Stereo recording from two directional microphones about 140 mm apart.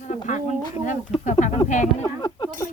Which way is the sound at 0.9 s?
60° left (ahead or behind).